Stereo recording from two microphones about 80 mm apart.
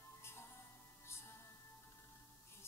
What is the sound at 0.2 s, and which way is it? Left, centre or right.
Music, left.